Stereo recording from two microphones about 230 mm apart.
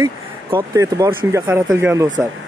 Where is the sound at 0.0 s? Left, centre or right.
Centre.